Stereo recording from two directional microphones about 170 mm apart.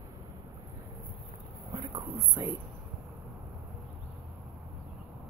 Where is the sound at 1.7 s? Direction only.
20° right (ahead or behind).